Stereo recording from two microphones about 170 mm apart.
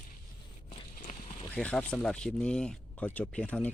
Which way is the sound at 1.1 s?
45° left (ahead or behind).